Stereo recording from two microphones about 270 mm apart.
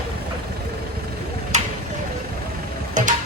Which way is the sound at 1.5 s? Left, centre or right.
Right.